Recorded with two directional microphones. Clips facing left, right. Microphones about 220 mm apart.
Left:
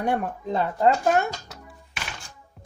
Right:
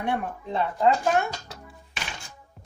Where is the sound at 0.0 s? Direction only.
45° left (ahead or behind).